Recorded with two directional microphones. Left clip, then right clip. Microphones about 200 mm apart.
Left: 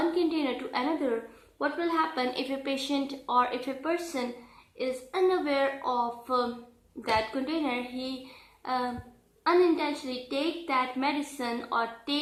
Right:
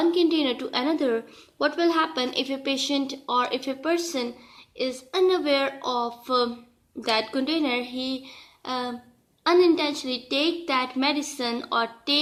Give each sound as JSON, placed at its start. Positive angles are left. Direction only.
{"t": 0.2, "sound": "a woman's voice", "side_deg": -50}